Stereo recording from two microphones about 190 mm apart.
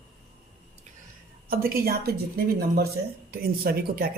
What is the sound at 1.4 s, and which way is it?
A woman's voice, 50° right (ahead or behind).